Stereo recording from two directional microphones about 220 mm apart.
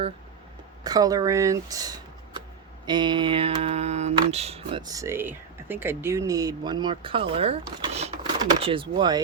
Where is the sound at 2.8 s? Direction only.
20° right (ahead or behind).